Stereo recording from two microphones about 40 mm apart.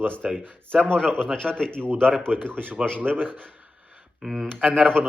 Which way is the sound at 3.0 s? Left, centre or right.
Right.